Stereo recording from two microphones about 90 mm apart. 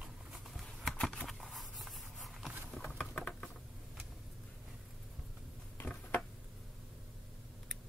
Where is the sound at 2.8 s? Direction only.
15° left (ahead or behind).